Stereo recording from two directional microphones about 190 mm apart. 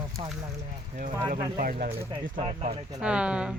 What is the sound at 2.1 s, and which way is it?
Speech, 25° right (ahead or behind).